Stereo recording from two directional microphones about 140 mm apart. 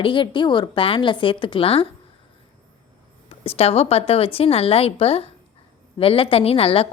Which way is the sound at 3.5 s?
45° left (ahead or behind).